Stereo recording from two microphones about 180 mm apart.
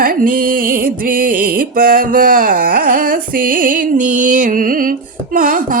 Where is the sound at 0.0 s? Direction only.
50° right (ahead or behind).